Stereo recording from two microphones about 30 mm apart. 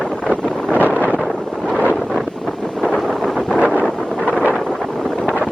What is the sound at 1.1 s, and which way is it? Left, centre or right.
Wind noise, centre.